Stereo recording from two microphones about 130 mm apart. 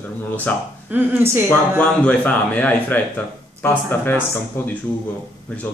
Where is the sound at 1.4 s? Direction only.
10° left (ahead or behind).